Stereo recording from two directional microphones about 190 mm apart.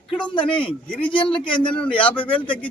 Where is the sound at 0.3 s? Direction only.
25° left (ahead or behind).